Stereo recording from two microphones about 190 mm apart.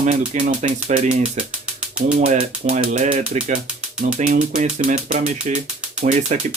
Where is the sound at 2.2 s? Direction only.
40° right (ahead or behind).